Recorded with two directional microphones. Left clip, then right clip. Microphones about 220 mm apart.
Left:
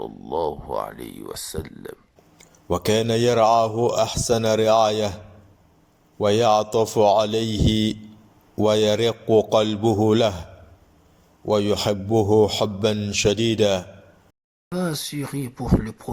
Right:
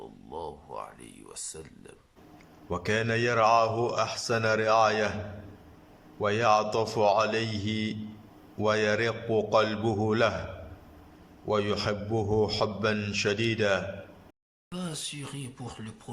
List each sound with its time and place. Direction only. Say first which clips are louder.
0.0 s speech: left 14 dB; 40° left (ahead or behind)
2.6 s speech: left 8 dB; 15° left (ahead or behind)
6.1 s speech: left 6 dB; 15° left (ahead or behind)
11.4 s speech: left 7 dB; 15° left (ahead or behind)
14.7 s speech: left 10 dB; 35° left (ahead or behind)